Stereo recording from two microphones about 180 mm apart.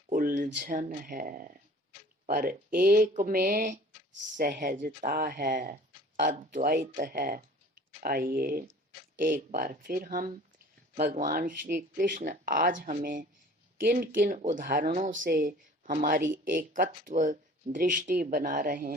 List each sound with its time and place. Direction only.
0.1 s speech: 50° right (ahead or behind)